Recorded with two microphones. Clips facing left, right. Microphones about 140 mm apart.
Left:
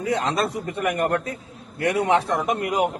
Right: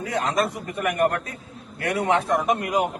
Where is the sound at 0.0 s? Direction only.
30° left (ahead or behind).